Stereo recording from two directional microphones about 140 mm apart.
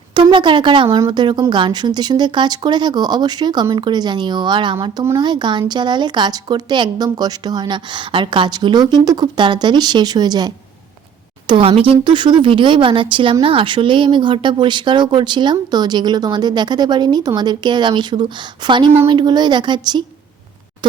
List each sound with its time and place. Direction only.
0.1 s speech: 35° right (ahead or behind)
0.9 s speech: 25° right (ahead or behind)